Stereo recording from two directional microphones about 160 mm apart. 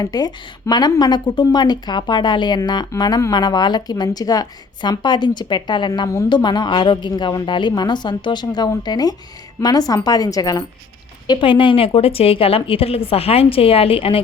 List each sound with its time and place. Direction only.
0.0 s a woman's voice: 25° left (ahead or behind)